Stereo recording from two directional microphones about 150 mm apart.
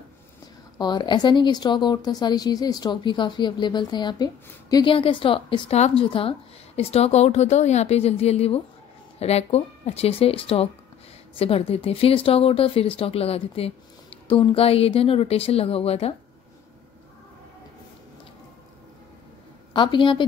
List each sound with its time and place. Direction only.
0.7 s a woman's voice: 30° left (ahead or behind)
19.7 s speech: 30° left (ahead or behind)